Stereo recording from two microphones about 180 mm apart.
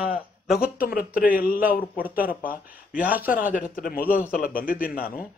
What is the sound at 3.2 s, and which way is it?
Speech, 50° left (ahead or behind).